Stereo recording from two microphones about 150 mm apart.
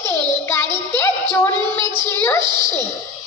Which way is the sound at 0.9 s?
15° left (ahead or behind).